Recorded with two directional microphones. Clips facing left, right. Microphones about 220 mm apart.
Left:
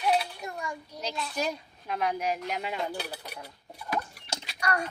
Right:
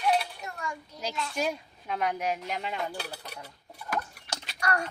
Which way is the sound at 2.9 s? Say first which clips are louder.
Left 2 dB; 15° left (ahead or behind).